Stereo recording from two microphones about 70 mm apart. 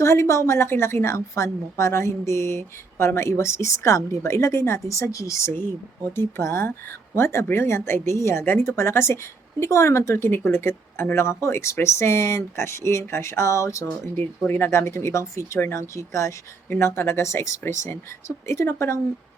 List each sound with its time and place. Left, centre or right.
0.0 s a woman's voice: left
14.2 s a woman's voice: left
16.7 s a woman's voice: left